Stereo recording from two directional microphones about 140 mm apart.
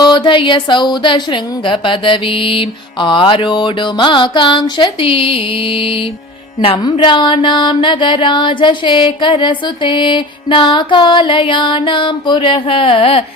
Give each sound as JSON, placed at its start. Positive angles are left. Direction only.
{"t": 0.0, "sound": "music", "side_deg": 30}